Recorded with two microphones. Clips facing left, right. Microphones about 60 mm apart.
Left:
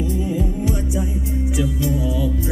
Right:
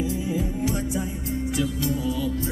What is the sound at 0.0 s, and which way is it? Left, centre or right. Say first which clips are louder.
Music: left 4 dB; centre.